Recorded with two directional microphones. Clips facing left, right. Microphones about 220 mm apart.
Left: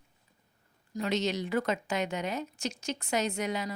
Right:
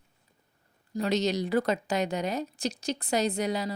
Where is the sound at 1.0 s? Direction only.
40° right (ahead or behind).